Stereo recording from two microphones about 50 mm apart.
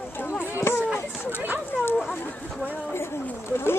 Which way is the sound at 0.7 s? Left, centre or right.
Left.